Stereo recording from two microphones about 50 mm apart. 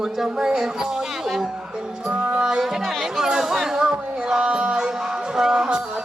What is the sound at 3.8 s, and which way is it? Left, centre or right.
Music, centre.